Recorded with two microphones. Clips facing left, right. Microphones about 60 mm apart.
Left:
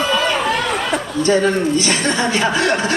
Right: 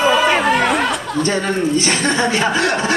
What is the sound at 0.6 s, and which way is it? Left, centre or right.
Chatter, right.